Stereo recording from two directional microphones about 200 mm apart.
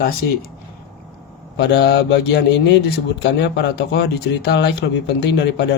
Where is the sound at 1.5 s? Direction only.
55° left (ahead or behind).